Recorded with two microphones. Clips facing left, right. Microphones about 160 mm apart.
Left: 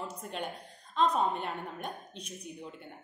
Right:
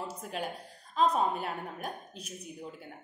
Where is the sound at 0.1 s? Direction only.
5° right (ahead or behind).